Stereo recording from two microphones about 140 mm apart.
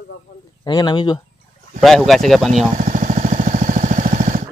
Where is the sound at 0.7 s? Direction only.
30° left (ahead or behind).